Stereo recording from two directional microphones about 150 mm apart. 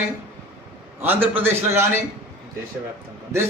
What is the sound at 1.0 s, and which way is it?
Speech, 15° right (ahead or behind).